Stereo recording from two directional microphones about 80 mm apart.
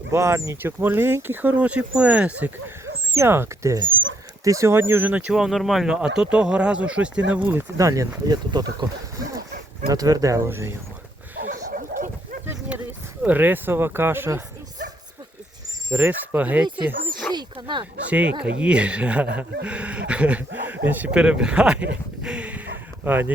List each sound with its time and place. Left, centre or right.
0.1 s speech: right; by 2.7 s centre
2.8 s speech: right
5.1 s speech: centre
7.8 s speech: right
8.4 s speech: right
9.9 s speech: right
13.2 s speech: right
15.9 s speech: right
16.6 s speech: right
17.3 s dog: right
18.1 s speech: centre
21.1 s speech: centre